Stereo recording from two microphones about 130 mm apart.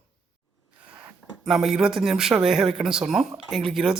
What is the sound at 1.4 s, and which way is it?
Speech, centre (ahead or behind).